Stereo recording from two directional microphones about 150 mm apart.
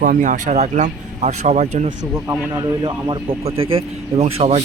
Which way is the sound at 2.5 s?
30° right (ahead or behind).